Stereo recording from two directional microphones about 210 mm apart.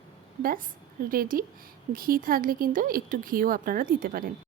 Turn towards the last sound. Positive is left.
turn(degrees=-40)  # may be behind; listen again after turning